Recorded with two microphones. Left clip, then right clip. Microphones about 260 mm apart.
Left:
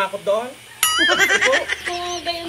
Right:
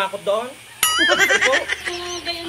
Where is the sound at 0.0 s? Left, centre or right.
Centre.